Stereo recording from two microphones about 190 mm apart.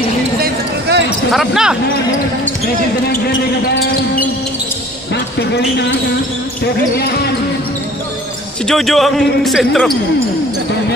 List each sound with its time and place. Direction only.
0.4 s a sound: 60° right (ahead or behind)
1.3 s speech: centre (ahead or behind)
3.3 s speech: 70° left (ahead or behind)
8.6 s speech: centre (ahead or behind)